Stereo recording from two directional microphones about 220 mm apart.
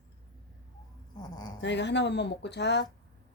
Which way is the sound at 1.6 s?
50° left (ahead or behind).